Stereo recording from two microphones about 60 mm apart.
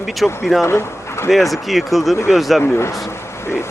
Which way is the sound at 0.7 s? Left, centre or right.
Left.